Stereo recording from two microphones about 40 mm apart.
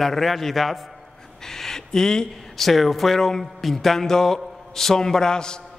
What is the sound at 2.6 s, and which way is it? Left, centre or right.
Speech, centre.